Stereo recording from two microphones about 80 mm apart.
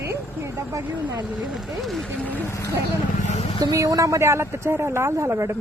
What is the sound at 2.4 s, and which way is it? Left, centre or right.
Speech, left.